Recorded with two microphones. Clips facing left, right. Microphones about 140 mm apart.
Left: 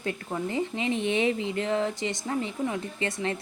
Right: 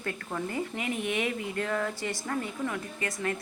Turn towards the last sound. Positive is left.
turn(degrees=25)  # may be behind; listen again after turning